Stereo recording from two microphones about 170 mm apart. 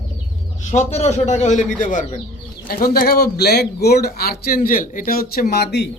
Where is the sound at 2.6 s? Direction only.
60° left (ahead or behind).